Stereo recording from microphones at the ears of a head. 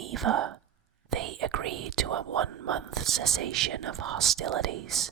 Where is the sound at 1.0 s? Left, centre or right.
Right.